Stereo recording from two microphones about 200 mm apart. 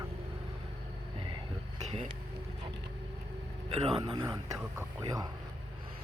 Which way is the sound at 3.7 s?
25° right (ahead or behind).